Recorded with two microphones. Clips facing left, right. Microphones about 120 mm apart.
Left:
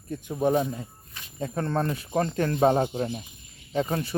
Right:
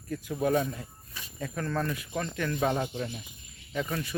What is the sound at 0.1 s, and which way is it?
Speech, 25° left (ahead or behind).